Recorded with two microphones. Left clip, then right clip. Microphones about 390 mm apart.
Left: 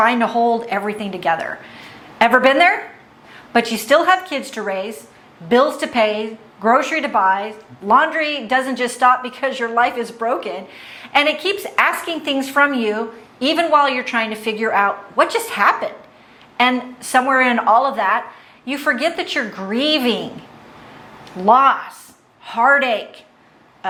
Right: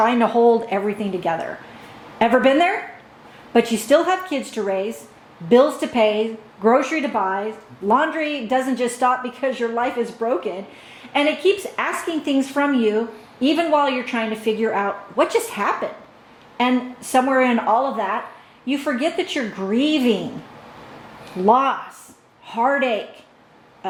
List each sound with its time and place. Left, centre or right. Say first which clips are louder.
0.0 s a woman's voice: even; centre
3.8 s a woman's voice: left 3 dB; left
21.4 s a woman's voice: left 4 dB; left